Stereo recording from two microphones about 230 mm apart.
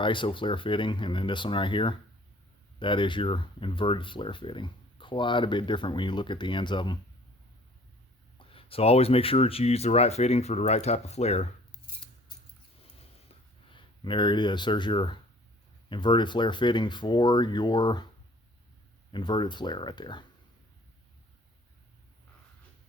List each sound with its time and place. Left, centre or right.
0.0 s speech: left
8.4 s speech: left
13.2 s a sound: left
15.9 s speech: left
19.1 s speech: centre